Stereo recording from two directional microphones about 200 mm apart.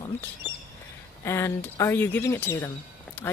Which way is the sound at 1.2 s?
15° left (ahead or behind).